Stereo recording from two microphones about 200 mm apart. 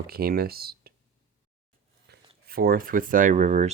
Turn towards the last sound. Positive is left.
turn(degrees=-35)  # may be behind; listen again after turning